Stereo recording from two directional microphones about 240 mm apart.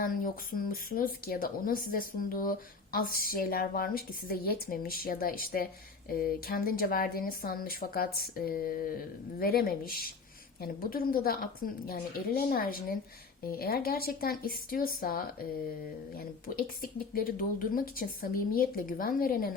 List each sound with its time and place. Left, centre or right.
0.0 s speech: left